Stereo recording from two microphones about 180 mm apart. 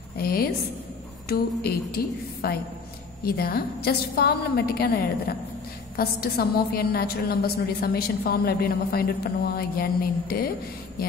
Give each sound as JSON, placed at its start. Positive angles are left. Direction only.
{"t": 0.2, "sound": "a woman's voice", "side_deg": 55}
{"t": 3.3, "sound": "a woman's voice", "side_deg": 55}